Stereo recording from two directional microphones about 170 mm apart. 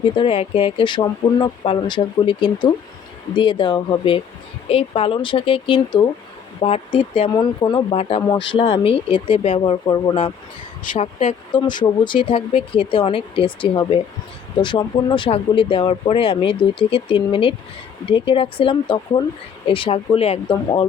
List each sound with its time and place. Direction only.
0.2 s speech: 35° left (ahead or behind)
11.5 s speech: 25° left (ahead or behind)